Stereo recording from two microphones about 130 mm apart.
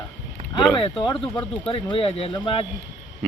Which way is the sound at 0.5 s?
40° left (ahead or behind).